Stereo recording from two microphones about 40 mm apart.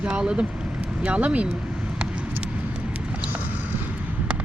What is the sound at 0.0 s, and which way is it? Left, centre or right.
Speech, right.